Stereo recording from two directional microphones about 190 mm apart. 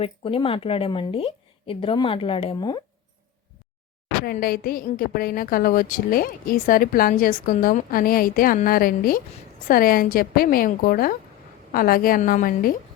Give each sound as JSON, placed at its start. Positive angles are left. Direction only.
{"t": 0.0, "sound": "speech", "side_deg": 30}
{"t": 4.3, "sound": "a woman's voice", "side_deg": 50}